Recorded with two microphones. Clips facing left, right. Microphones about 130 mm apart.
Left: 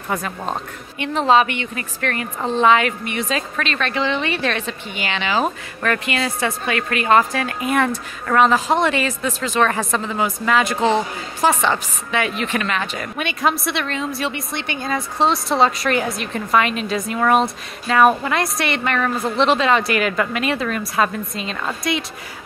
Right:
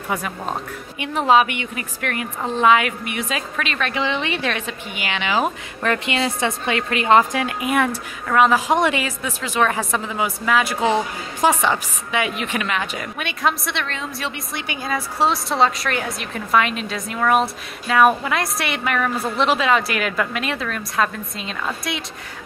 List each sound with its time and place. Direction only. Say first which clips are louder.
0.1 s a woman's voice: left 1 dB; 10° right (ahead or behind)
13.2 s a woman's voice: left 2 dB; centre (ahead or behind)